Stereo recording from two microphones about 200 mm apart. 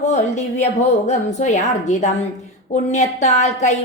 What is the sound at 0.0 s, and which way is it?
A woman's voice, 35° left (ahead or behind).